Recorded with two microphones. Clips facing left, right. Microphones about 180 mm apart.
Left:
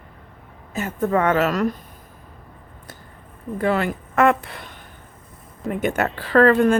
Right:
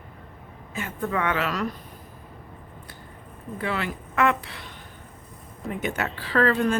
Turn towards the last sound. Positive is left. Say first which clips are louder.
# left 7 dB
turn(degrees=50)  # may be behind; listen again after turning